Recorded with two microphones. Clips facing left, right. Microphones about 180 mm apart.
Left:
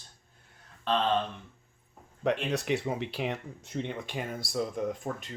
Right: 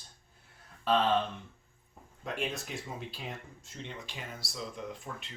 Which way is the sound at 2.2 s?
75° left (ahead or behind).